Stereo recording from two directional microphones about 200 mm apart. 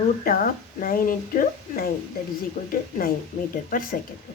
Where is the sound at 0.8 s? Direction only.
45° left (ahead or behind).